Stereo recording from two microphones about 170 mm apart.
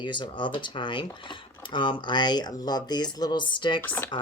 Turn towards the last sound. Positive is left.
turn(degrees=10)  # may be behind; listen again after turning